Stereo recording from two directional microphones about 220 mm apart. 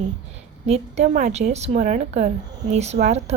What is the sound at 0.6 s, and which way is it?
A woman's voice, 30° right (ahead or behind).